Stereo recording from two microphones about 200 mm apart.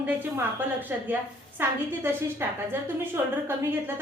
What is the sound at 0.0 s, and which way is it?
A woman's voice, 10° right (ahead or behind).